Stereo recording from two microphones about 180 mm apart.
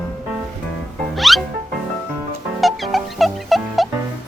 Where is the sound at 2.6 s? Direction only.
Centre (ahead or behind).